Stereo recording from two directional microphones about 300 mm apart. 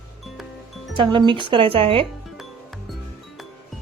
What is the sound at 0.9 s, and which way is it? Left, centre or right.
Speech, centre.